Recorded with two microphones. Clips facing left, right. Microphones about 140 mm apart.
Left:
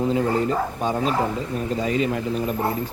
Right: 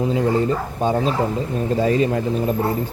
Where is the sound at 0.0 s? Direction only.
20° right (ahead or behind).